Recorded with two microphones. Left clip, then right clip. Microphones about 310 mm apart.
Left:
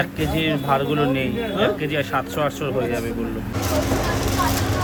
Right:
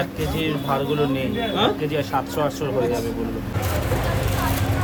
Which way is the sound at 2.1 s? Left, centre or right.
Centre.